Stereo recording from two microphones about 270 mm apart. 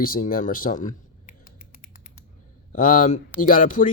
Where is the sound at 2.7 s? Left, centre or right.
Left.